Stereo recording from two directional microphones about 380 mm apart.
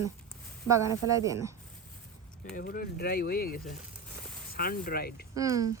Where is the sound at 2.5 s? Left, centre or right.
Left.